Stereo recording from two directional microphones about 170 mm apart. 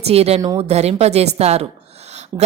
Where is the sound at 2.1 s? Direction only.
40° right (ahead or behind).